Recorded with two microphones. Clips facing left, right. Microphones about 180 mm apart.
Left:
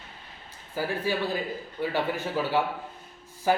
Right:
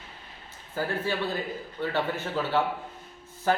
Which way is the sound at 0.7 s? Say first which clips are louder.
Left 1 dB; 10° left (ahead or behind).